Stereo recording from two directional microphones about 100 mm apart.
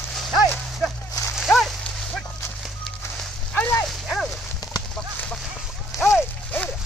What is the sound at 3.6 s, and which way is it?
Dog, 25° left (ahead or behind).